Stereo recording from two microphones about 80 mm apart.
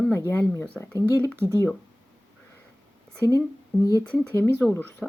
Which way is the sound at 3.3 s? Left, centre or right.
Left.